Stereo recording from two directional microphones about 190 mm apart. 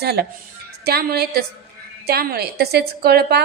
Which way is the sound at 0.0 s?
55° right (ahead or behind).